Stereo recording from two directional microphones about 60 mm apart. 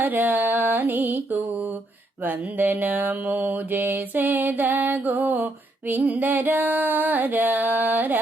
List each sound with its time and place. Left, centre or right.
0.0 s mantra: right